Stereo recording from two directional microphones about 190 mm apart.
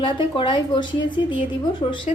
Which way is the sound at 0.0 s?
25° left (ahead or behind).